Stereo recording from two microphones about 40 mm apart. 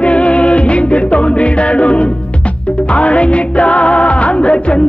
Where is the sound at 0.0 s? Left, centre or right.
Left.